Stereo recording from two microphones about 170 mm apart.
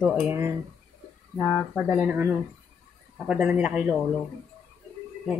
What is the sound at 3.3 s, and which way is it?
Speech, 5° right (ahead or behind).